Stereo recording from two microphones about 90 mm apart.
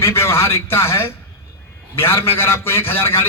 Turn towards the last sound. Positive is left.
turn(degrees=25)  # may be behind; listen again after turning